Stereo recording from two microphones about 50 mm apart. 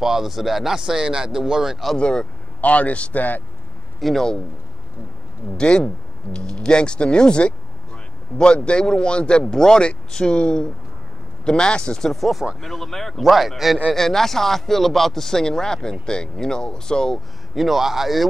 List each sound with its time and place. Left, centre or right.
0.0 s speech: centre
2.0 s speech: left
4.0 s speech: centre
5.6 s speech: centre
12.2 s speech: centre
13.3 s speech: centre
17.6 s speech: centre